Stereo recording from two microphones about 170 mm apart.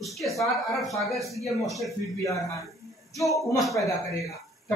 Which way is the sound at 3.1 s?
Centre (ahead or behind).